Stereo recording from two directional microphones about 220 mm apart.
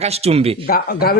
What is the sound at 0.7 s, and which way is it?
Speech, 45° left (ahead or behind).